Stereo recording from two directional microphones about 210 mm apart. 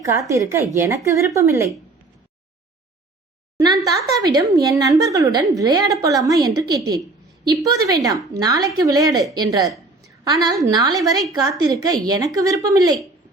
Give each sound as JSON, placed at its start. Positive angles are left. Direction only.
{"t": 0.2, "sound": "speech", "side_deg": -15}
{"t": 3.6, "sound": "a woman's voice", "side_deg": -20}